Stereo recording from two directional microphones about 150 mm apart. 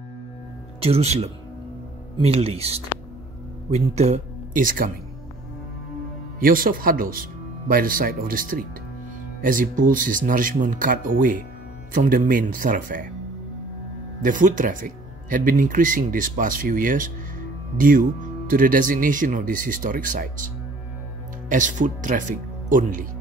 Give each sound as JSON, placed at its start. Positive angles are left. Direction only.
{"t": 0.7, "sound": "speech", "side_deg": -40}
{"t": 4.6, "sound": "speech", "side_deg": -70}
{"t": 6.4, "sound": "speech", "side_deg": -70}
{"t": 14.2, "sound": "speech", "side_deg": -65}